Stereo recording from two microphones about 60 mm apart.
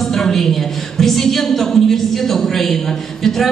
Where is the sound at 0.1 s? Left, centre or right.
Centre.